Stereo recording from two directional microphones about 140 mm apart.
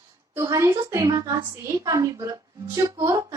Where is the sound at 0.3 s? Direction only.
25° right (ahead or behind).